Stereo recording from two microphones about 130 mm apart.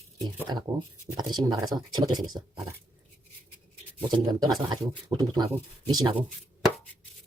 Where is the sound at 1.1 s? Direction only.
30° right (ahead or behind).